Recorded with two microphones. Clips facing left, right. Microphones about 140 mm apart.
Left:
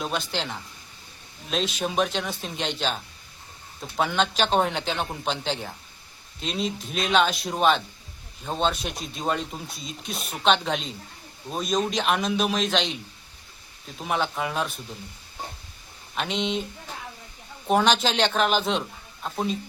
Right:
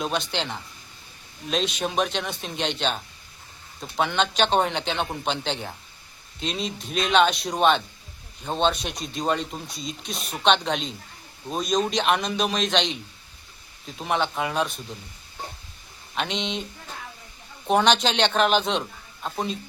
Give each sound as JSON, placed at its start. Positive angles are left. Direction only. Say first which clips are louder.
{"t": 0.0, "sound": "speech", "louder": "right 2 dB", "side_deg": 5}
{"t": 14.0, "sound": "speech", "louder": "right 1 dB", "side_deg": 0}
{"t": 16.1, "sound": "speech", "louder": "left 1 dB", "side_deg": 0}
{"t": 17.7, "sound": "speech", "louder": "right 1 dB", "side_deg": 0}